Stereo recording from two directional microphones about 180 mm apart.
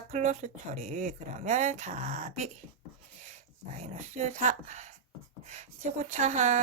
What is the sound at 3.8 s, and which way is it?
Speech, 40° right (ahead or behind).